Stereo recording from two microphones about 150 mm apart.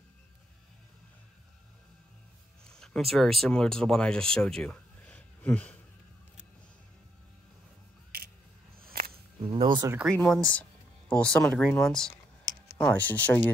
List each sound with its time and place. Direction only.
2.6 s speech: 5° left (ahead or behind)
8.7 s a sound: 80° right
9.4 s speech: 30° right (ahead or behind)
10.1 s speech: 5° left (ahead or behind)